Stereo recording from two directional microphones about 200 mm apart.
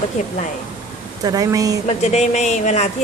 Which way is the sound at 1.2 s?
20° right (ahead or behind).